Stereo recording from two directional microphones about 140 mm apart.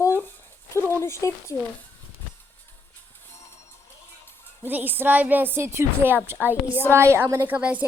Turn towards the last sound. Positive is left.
turn(degrees=-10)  # may be behind; listen again after turning